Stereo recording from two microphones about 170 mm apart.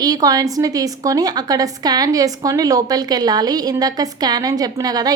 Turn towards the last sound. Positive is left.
turn(degrees=-25)  # may be behind; listen again after turning